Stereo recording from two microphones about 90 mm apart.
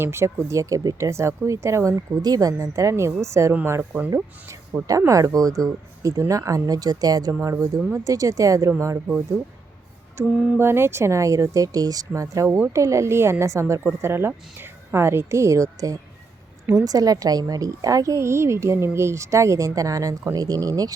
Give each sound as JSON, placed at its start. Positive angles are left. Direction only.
{"t": 0.0, "sound": "a woman's voice", "side_deg": -30}
{"t": 4.9, "sound": "a woman's voice", "side_deg": -40}
{"t": 10.2, "sound": "a woman's voice", "side_deg": -25}
{"t": 12.5, "sound": "speech", "side_deg": -25}
{"t": 12.7, "sound": "a woman's voice", "side_deg": -35}